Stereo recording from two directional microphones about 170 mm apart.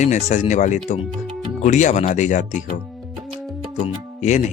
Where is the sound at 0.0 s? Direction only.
45° left (ahead or behind).